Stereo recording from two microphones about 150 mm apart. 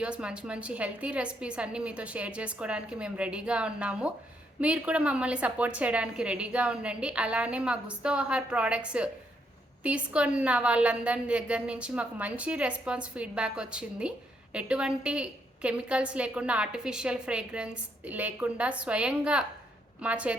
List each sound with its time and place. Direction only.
0.0 s a woman's voice: 5° right (ahead or behind)